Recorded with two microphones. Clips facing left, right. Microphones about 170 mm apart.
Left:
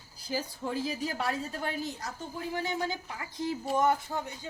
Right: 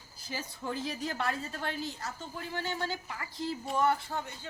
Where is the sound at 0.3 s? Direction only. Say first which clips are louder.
Left 4 dB; 5° left (ahead or behind).